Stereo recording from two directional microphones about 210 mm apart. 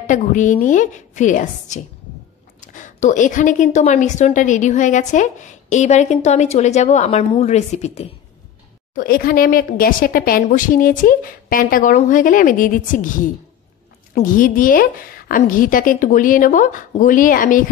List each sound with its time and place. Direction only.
0.0 s a woman's voice: 35° left (ahead or behind)
8.9 s a woman's voice: 45° left (ahead or behind)